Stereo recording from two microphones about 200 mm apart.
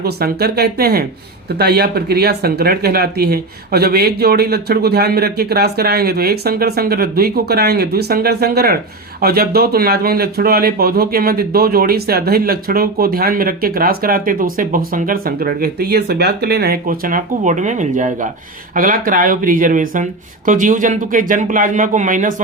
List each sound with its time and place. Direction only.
0.0 s speech: 50° right (ahead or behind)